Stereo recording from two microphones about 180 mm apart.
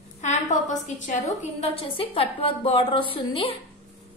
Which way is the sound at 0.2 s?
40° left (ahead or behind).